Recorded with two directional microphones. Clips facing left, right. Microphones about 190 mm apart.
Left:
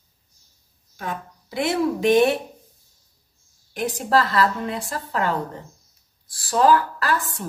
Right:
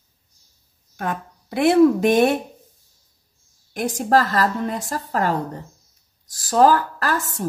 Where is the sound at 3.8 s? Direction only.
45° right (ahead or behind).